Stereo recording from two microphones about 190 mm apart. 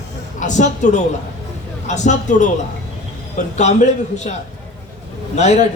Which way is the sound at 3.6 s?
35° left (ahead or behind).